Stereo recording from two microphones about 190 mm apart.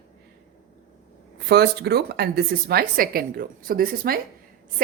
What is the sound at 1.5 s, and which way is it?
A woman's voice, 60° right (ahead or behind).